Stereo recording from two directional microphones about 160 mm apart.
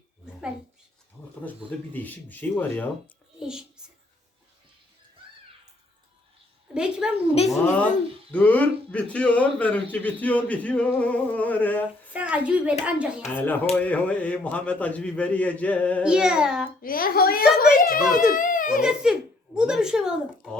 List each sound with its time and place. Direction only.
1.9 s a man's voice: 10° left (ahead or behind)
3.4 s a sound: 5° right (ahead or behind)
6.7 s a woman's voice: 5° right (ahead or behind); by 12.1 s 10° left (ahead or behind)
12.1 s a woman's voice: 10° right (ahead or behind)
13.3 s a man's voice: 10° left (ahead or behind)
16.0 s a child's voice: 5° right (ahead or behind)
16.8 s a child's voice: 65° left (ahead or behind)
18.8 s a child's voice: 5° right (ahead or behind)